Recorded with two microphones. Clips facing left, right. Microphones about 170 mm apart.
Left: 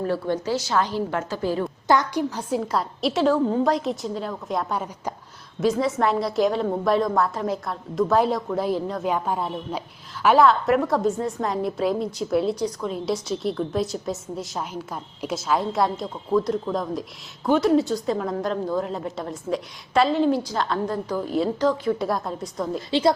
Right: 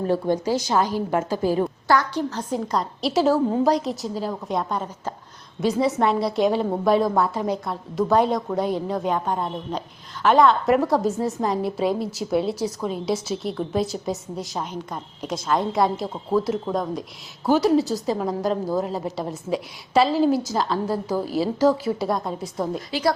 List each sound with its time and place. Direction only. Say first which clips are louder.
0.1 s a woman's voice: right 6 dB; 15° right (ahead or behind)
1.9 s a woman's voice: left 2 dB; 15° left (ahead or behind); by 22.8 s centre (ahead or behind)
22.9 s a woman's voice: left 4 dB; 25° left (ahead or behind)